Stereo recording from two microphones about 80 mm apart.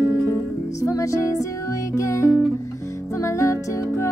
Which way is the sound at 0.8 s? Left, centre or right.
Left.